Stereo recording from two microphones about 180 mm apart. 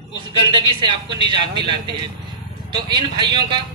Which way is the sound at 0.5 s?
25° right (ahead or behind).